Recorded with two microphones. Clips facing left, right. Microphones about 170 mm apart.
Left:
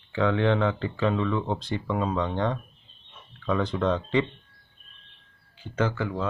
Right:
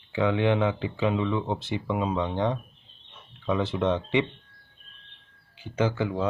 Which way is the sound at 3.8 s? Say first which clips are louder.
Right 1 dB; 20° right (ahead or behind).